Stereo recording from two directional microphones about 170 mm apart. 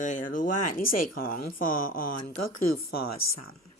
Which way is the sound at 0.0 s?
50° left (ahead or behind).